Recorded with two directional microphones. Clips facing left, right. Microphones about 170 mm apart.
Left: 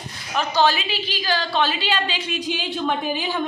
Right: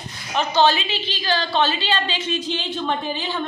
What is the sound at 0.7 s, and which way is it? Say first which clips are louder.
A man's voice: right 1 dB; 10° left (ahead or behind).